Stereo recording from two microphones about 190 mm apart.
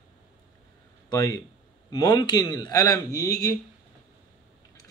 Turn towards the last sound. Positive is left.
turn(degrees=20)  # may be behind; listen again after turning